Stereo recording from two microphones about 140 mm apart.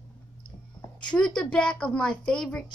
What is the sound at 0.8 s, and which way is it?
A woman's voice, 5° left (ahead or behind).